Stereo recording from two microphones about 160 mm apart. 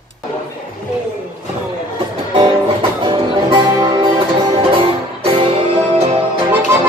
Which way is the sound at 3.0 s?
30° right (ahead or behind).